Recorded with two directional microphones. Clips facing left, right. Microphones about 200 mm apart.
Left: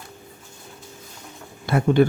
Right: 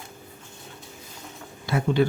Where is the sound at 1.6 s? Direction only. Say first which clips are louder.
Left 5 dB; 55° left (ahead or behind).